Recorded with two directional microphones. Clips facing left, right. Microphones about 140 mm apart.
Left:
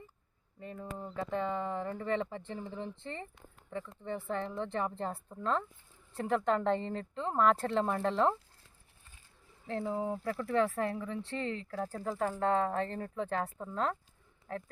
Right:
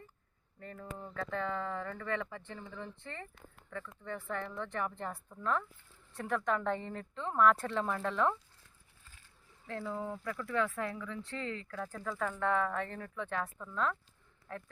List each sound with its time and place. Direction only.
0.6 s speech: 15° left (ahead or behind); by 2.7 s 35° left (ahead or behind)
2.7 s speech: 20° left (ahead or behind)
9.6 s speech: 30° left (ahead or behind)